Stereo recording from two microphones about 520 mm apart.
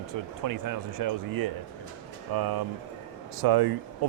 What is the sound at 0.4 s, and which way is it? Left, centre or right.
Speech, right.